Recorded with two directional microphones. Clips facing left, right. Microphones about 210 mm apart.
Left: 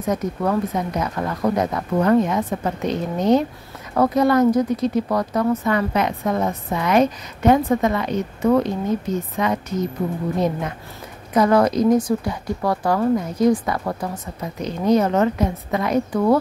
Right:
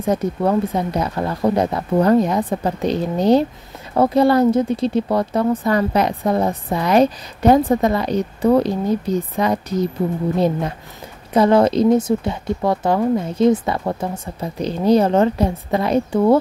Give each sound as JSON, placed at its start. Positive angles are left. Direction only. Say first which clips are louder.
{"t": 0.0, "sound": "speech", "louder": "right 3 dB", "side_deg": -30}
{"t": 11.3, "sound": "speech", "louder": "right 2 dB", "side_deg": -25}